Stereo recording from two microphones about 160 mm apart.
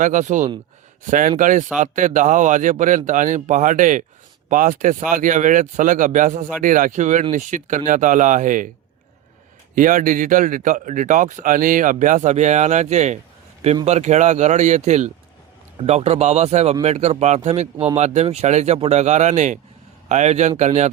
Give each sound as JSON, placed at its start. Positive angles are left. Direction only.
{"t": 0.0, "sound": "speech", "side_deg": -50}
{"t": 9.7, "sound": "speech", "side_deg": -55}